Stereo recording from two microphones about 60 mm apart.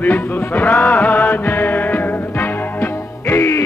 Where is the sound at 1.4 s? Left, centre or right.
Left.